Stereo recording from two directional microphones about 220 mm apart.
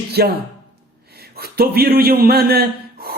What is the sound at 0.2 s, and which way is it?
A man's voice, 45° right (ahead or behind).